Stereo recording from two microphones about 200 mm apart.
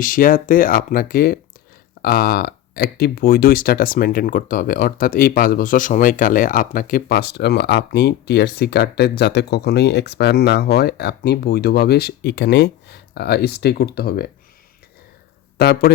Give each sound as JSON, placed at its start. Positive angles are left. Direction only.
{"t": 0.0, "sound": "speech", "side_deg": 45}
{"t": 15.5, "sound": "speech", "side_deg": 55}